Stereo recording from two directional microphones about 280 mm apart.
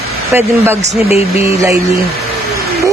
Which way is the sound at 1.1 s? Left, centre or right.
Left.